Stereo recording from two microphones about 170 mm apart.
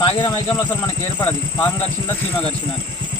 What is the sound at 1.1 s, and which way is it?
Speech, 15° left (ahead or behind).